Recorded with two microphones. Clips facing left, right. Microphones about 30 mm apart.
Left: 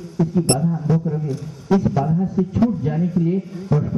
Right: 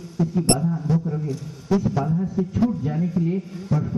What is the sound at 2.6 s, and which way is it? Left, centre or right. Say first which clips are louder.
Speech: left 3 dB; centre.